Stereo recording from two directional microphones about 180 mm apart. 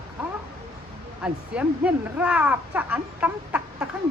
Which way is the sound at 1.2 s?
5° right (ahead or behind).